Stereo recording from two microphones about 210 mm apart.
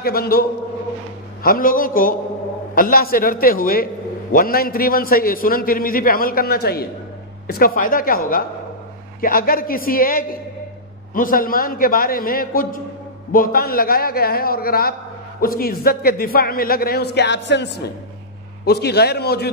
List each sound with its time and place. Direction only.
0.0 s a man's voice: 45° left (ahead or behind)